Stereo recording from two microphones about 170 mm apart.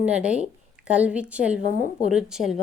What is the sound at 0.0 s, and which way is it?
A woman's voice, 5° right (ahead or behind).